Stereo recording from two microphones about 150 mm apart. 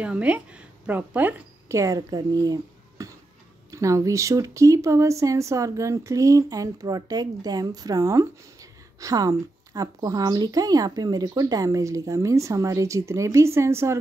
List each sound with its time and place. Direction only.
0.0 s a woman's voice: 10° right (ahead or behind)